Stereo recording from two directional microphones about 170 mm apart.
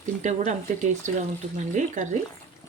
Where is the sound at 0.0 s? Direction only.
45° right (ahead or behind).